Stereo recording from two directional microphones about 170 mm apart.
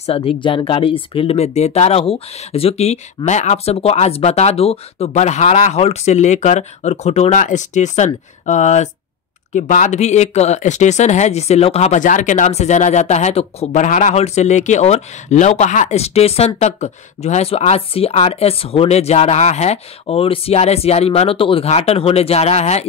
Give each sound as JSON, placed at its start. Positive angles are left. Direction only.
{"t": 0.0, "sound": "speech", "side_deg": 35}